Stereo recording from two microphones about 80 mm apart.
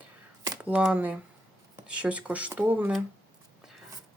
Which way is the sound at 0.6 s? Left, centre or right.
Centre.